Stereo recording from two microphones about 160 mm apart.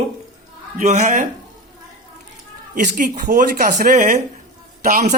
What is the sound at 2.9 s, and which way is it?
Speech, 60° right (ahead or behind).